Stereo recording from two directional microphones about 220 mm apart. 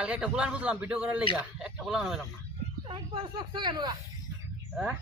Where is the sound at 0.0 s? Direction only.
5° right (ahead or behind).